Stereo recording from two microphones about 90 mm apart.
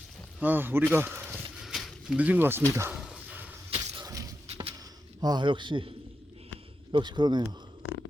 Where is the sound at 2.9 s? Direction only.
10° right (ahead or behind).